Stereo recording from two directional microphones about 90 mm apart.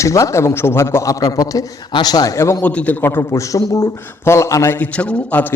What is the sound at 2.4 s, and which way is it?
Speech, 30° left (ahead or behind).